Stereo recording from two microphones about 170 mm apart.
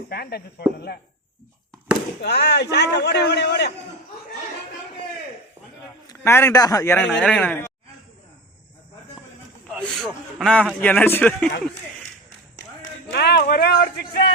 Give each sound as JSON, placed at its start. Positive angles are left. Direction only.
{"t": 0.1, "sound": "speech", "side_deg": 65}
{"t": 2.2, "sound": "a man's voice", "side_deg": 75}
{"t": 6.1, "sound": "a man's voice", "side_deg": 15}
{"t": 7.0, "sound": "speech", "side_deg": 5}
{"t": 9.6, "sound": "a man's voice", "side_deg": 5}
{"t": 13.1, "sound": "speech", "side_deg": 75}